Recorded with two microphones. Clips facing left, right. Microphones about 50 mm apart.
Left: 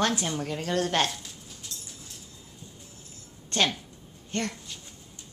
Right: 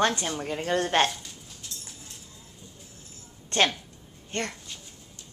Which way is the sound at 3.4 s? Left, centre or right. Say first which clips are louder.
Right 2 dB; right.